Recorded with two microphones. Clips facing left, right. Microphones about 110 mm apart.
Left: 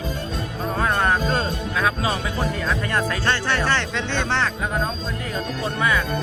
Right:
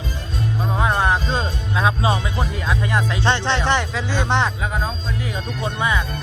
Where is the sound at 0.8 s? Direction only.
15° right (ahead or behind).